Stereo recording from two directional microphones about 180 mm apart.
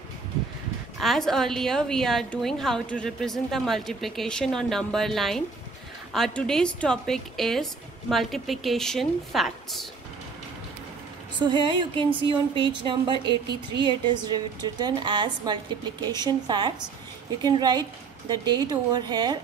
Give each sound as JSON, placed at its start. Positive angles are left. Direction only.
{"t": 1.0, "sound": "a woman's voice", "side_deg": 0}
{"t": 11.4, "sound": "speech", "side_deg": -25}